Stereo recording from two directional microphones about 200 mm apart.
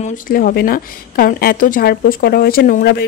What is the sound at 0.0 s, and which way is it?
Speech, 45° left (ahead or behind).